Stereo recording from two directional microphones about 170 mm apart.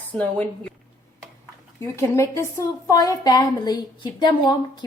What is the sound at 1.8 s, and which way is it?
A woman's voice, 15° left (ahead or behind).